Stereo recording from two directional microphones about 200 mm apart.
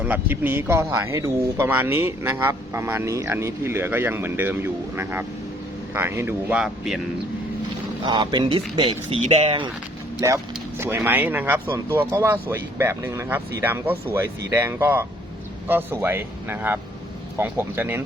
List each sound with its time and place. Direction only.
0.0 s speech: 10° right (ahead or behind)
8.0 s speech: 20° right (ahead or behind)
10.2 s speech: 15° right (ahead or behind)